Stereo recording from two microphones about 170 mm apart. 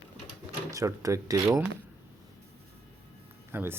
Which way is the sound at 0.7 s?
20° right (ahead or behind).